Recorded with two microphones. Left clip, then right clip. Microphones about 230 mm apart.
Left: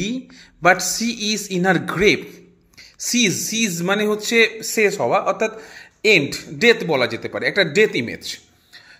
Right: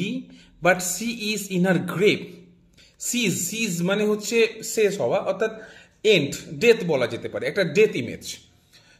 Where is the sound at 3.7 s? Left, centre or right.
Centre.